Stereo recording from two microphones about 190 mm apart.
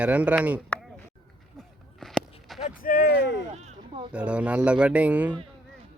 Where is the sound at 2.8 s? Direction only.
55° left (ahead or behind).